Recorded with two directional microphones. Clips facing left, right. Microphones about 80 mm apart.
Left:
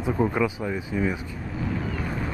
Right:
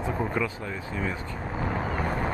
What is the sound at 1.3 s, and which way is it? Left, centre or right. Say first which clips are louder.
Vehicle: even; right.